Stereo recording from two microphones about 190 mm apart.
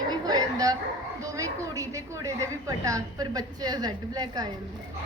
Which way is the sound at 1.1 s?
15° right (ahead or behind).